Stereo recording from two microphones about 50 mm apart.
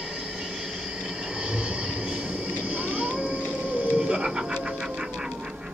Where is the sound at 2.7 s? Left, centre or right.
Right.